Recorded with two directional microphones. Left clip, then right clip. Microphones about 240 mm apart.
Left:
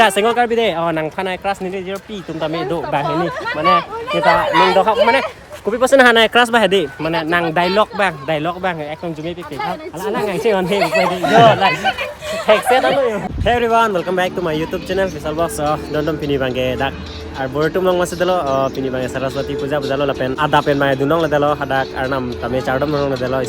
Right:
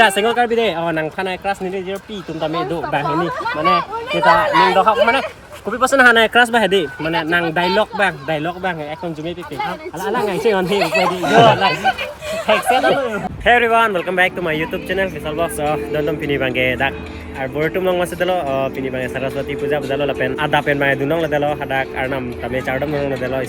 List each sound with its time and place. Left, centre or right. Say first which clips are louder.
0.0 s speech: left 1 dB; centre
5.6 s speech: left 2 dB; left
6.1 s speech: left 1 dB; centre
12.7 s speech: left 2 dB; left
13.4 s speech: right 1 dB; centre